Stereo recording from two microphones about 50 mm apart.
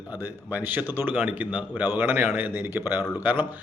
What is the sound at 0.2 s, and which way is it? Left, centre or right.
A man's voice, right.